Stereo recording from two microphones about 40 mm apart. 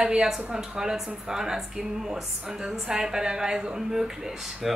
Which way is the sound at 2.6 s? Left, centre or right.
Centre.